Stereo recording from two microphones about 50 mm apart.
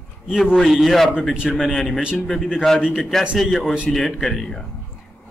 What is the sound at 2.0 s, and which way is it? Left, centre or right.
Speech, right.